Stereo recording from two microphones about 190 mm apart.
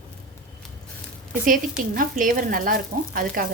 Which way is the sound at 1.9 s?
45° right (ahead or behind).